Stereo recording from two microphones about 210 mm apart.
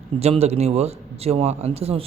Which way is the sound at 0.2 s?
30° right (ahead or behind).